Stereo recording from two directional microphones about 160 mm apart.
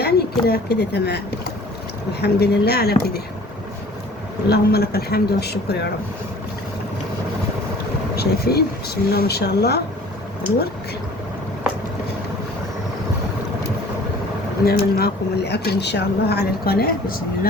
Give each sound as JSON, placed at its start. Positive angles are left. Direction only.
{"t": 0.0, "sound": "a woman's voice", "side_deg": 80}
{"t": 2.2, "sound": "speech", "side_deg": 90}
{"t": 4.4, "sound": "speech", "side_deg": 85}
{"t": 8.1, "sound": "speech", "side_deg": 80}
{"t": 14.6, "sound": "speech", "side_deg": 75}